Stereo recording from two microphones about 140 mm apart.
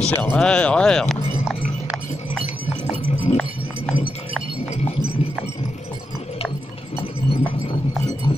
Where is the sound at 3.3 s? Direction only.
45° left (ahead or behind).